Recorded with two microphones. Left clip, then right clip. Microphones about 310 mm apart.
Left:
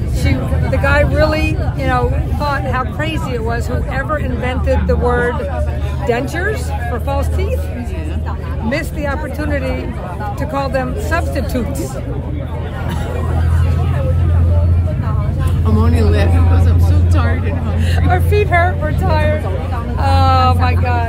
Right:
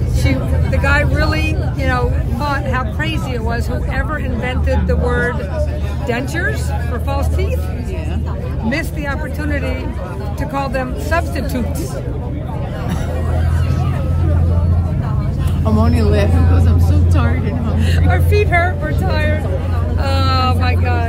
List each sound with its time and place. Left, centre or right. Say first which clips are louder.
0.2 s speech: even; centre
8.6 s speech: left 2 dB; centre
15.6 s speech: right 1 dB; centre
18.1 s speech: left 2 dB; centre